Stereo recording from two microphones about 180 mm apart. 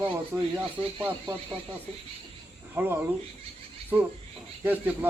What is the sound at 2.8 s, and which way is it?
Speech, 15° right (ahead or behind).